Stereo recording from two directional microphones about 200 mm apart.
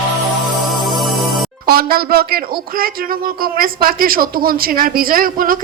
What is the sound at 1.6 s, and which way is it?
Speech, 50° right (ahead or behind).